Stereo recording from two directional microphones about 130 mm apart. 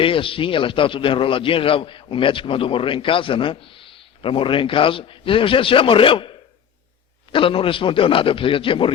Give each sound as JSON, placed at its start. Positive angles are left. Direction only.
{"t": 0.0, "sound": "a man's voice", "side_deg": 45}
{"t": 7.3, "sound": "a man's voice", "side_deg": 45}